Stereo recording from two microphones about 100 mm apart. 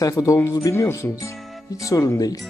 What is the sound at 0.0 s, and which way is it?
Speech, 35° left (ahead or behind).